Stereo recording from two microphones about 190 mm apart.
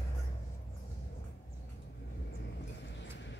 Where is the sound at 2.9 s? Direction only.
65° left (ahead or behind).